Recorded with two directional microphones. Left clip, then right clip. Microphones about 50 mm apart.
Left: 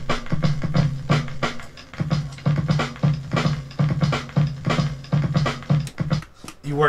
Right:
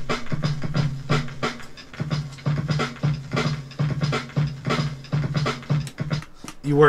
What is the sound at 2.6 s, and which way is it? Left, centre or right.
Music, left.